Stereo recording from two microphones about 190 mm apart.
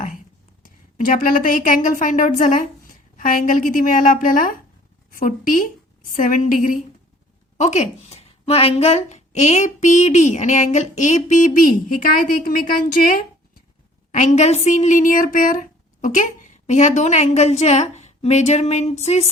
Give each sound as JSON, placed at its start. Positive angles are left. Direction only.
{"t": 0.6, "sound": "a woman's voice", "side_deg": 45}